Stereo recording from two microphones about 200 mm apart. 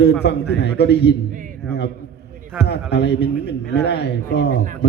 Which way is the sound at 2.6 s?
55° left (ahead or behind).